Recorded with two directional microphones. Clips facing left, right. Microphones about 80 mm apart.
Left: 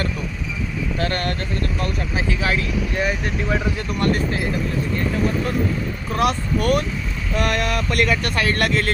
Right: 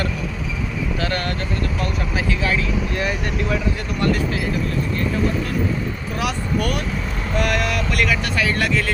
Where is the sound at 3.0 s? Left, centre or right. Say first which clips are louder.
Left 1 dB; centre.